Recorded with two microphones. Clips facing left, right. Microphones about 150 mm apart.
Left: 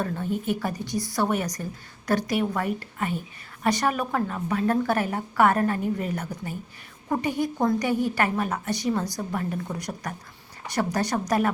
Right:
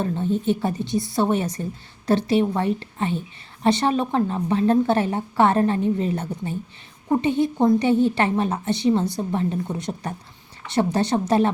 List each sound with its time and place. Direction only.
0.0 s a woman's voice: 25° right (ahead or behind)